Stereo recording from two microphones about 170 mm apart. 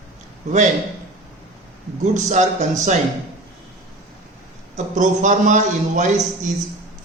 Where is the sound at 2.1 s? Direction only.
45° right (ahead or behind).